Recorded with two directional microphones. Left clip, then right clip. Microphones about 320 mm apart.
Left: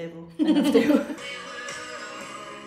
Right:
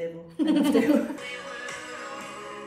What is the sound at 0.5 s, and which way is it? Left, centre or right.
Speech, centre.